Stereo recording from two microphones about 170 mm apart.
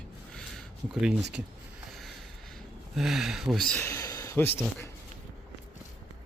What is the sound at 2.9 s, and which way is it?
Speech, centre (ahead or behind).